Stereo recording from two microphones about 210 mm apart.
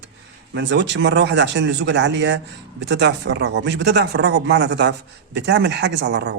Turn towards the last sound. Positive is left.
turn(degrees=-55)  # may be behind; listen again after turning